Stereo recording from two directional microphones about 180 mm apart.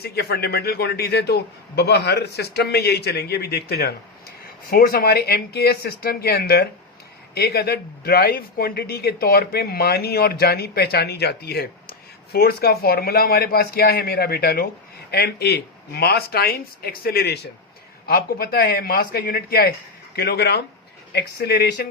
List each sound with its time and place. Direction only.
0.0 s speech: 60° left (ahead or behind)